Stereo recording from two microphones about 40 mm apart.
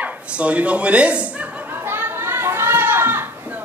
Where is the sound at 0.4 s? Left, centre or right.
Right.